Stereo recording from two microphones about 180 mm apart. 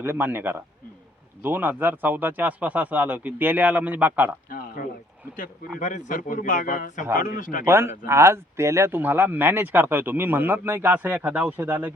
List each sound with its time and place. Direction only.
0.0 s speech: 10° right (ahead or behind)
4.4 s a sound: 50° left (ahead or behind)
5.8 s speech: 45° left (ahead or behind)
7.6 s speech: 15° right (ahead or behind)